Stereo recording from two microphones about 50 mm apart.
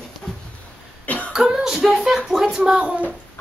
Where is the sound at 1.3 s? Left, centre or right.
Centre.